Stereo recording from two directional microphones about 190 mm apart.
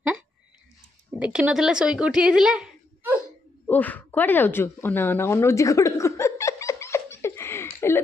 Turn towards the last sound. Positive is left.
turn(degrees=15)  # may be behind; listen again after turning